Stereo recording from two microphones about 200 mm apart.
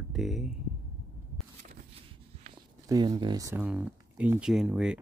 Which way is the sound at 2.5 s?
20° right (ahead or behind).